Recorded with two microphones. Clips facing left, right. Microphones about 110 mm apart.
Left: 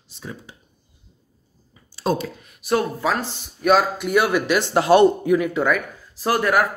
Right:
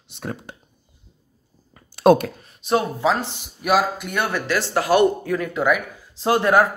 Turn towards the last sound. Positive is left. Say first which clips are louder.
# right 2 dB
turn(degrees=-25)  # may be behind; listen again after turning